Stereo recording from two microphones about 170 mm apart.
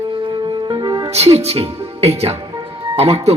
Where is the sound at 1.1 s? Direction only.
40° right (ahead or behind).